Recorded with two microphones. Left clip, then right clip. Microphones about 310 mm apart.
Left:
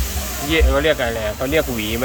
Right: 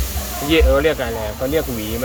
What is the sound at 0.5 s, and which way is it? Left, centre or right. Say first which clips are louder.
Speech: right 2 dB; centre.